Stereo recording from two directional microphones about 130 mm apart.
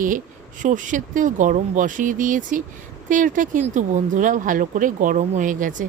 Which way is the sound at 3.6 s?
70° right (ahead or behind).